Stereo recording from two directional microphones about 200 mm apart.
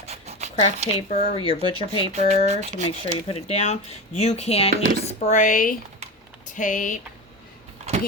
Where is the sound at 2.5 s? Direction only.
35° right (ahead or behind).